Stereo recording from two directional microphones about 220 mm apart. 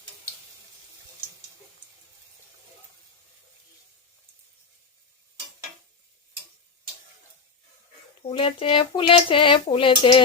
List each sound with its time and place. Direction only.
8.3 s speech: 25° left (ahead or behind)